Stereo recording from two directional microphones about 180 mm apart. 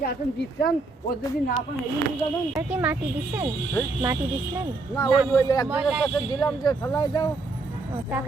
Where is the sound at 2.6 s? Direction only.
10° right (ahead or behind).